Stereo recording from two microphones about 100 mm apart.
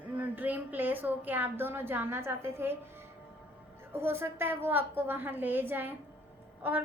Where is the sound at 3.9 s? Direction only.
25° right (ahead or behind).